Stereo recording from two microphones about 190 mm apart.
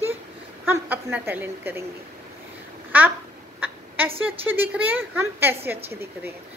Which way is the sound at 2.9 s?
10° right (ahead or behind).